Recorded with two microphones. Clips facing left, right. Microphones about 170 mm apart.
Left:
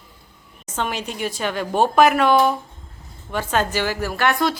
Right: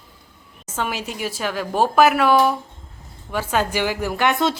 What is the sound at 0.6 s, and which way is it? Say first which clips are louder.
A woman's voice: even; 5° right (ahead or behind).